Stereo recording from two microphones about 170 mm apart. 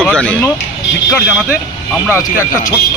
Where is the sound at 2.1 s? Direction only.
15° left (ahead or behind).